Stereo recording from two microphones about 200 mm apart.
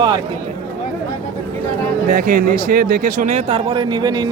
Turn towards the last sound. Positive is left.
turn(degrees=-20)  # may be behind; listen again after turning